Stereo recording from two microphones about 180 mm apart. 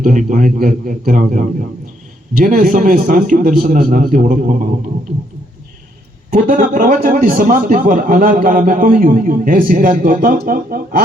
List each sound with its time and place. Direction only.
0.0 s a man's voice: 45° right (ahead or behind)
6.3 s a man's voice: 45° right (ahead or behind)